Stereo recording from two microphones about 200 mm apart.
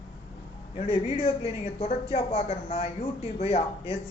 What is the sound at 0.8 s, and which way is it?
Speech, 30° left (ahead or behind).